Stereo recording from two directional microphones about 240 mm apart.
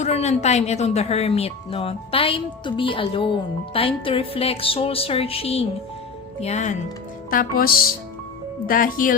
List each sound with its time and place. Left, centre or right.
0.0 s speech: left